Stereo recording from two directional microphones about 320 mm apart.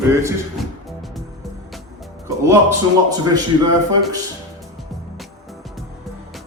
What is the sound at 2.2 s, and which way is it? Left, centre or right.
Speech, centre.